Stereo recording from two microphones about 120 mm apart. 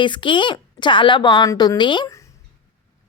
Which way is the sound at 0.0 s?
45° left (ahead or behind).